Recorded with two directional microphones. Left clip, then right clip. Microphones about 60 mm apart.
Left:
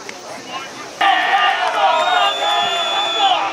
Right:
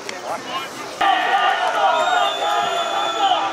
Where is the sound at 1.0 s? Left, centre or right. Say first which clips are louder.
Left 3 dB; centre.